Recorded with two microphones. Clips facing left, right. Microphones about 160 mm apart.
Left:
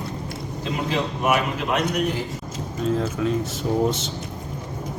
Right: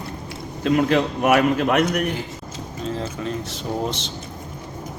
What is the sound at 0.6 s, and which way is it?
A man's voice, 60° right (ahead or behind).